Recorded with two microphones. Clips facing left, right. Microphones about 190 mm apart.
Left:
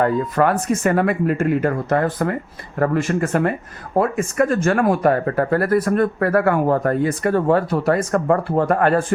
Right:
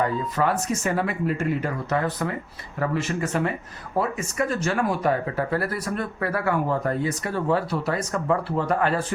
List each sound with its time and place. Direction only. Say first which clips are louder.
0.0 s speech: left 6 dB; 55° left (ahead or behind)